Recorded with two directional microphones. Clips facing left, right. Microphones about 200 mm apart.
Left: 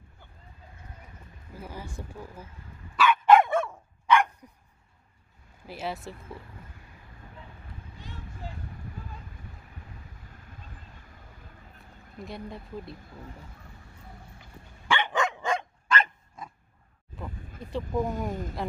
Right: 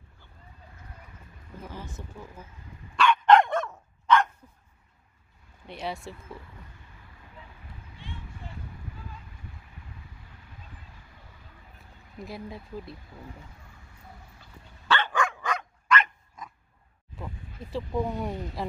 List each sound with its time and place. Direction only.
1.6 s speech: 10° left (ahead or behind)
3.0 s dog: 5° left (ahead or behind)
5.7 s speech: 5° left (ahead or behind)
12.2 s speech: centre (ahead or behind)
14.4 s dog: 15° left (ahead or behind)
17.6 s speech: centre (ahead or behind)